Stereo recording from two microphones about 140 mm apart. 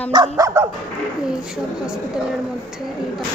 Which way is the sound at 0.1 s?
25° right (ahead or behind).